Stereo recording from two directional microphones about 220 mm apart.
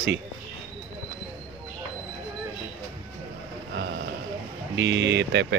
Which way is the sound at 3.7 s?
50° right (ahead or behind).